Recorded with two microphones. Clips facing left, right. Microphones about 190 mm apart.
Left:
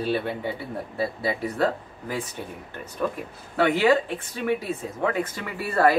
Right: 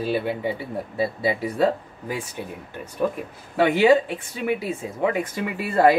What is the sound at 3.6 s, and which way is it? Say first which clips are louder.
Speech: right 3 dB; 15° right (ahead or behind).